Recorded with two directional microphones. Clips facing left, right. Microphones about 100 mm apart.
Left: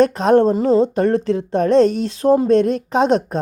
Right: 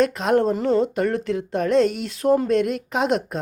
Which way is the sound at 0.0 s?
35° left (ahead or behind).